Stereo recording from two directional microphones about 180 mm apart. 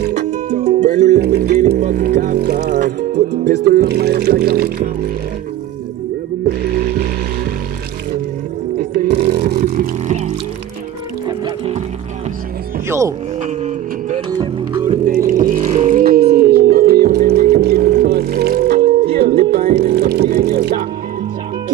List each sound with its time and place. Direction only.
0.1 s music: 40° right (ahead or behind)
1.2 s music: 60° right (ahead or behind)
1.8 s music: 45° right (ahead or behind)
2.1 s speech: 55° right (ahead or behind)
8.7 s roaring cats: 50° right (ahead or behind)
9.1 s a sound: 40° right (ahead or behind)
9.5 s vehicle: 55° right (ahead or behind)
10.0 s music: 40° right (ahead or behind)
14.3 s music: 25° right (ahead or behind)
15.0 s music: 50° right (ahead or behind)
16.1 s music: 60° right (ahead or behind)